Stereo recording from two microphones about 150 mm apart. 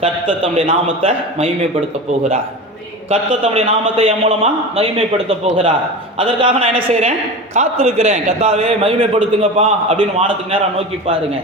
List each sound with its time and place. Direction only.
0.0 s a man's voice: 35° right (ahead or behind)
3.1 s a man's voice: 45° right (ahead or behind)